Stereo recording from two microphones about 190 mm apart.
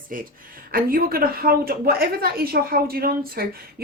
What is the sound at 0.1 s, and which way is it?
A woman's voice, 45° right (ahead or behind).